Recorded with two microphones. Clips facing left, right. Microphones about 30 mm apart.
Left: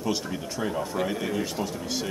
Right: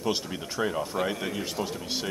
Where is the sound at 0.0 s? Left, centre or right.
Centre.